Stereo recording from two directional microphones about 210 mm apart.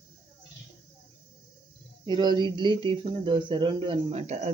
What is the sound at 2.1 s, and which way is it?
Speech, 20° right (ahead or behind).